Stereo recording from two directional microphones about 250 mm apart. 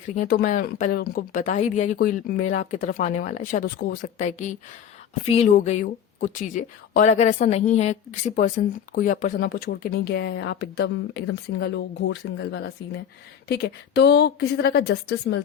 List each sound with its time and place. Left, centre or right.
0.2 s speech: left